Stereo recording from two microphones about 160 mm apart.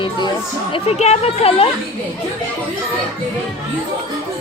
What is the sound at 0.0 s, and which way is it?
Speech, 30° left (ahead or behind).